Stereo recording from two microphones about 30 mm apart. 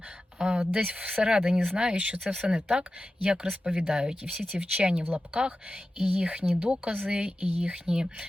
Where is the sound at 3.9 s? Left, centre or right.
Right.